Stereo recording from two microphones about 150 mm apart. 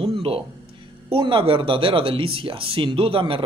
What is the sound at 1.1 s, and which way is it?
Speech, 35° right (ahead or behind).